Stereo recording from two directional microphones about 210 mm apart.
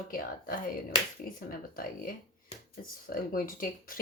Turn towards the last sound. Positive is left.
turn(degrees=40)  # may be behind; listen again after turning